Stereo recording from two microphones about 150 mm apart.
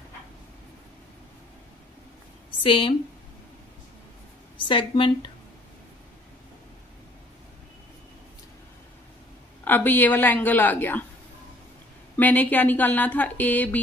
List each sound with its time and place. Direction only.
2.6 s speech: 35° left (ahead or behind)
4.6 s speech: 35° left (ahead or behind)
9.7 s speech: 10° left (ahead or behind)
12.2 s speech: 10° left (ahead or behind)